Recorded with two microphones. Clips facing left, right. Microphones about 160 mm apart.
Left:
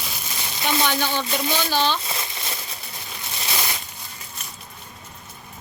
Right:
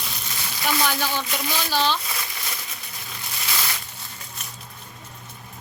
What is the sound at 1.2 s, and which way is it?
Speech, 30° left (ahead or behind).